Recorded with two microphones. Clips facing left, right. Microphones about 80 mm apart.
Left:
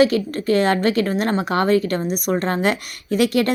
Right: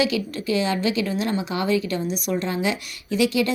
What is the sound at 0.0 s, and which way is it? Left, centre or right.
A woman's voice, left.